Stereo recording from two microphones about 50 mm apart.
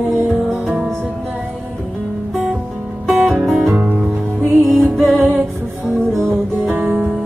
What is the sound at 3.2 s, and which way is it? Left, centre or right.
Music, centre.